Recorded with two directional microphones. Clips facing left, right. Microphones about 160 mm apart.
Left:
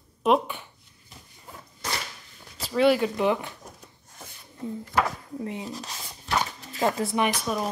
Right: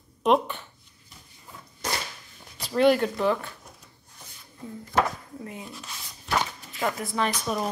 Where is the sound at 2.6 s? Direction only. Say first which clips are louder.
Even; centre (ahead or behind).